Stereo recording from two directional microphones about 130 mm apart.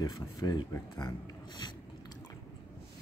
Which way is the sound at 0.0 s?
30° left (ahead or behind).